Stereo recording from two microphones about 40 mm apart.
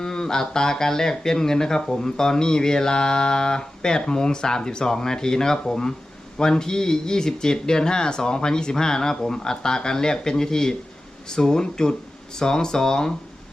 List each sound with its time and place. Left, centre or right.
0.0 s speech: centre